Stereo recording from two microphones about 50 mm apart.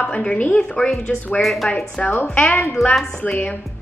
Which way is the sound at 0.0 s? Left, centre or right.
Left.